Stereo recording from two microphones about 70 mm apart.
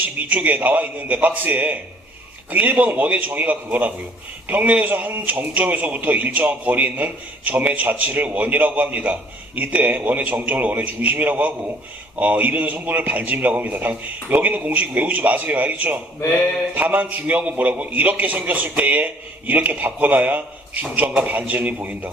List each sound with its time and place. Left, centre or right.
0.2 s a man's voice: right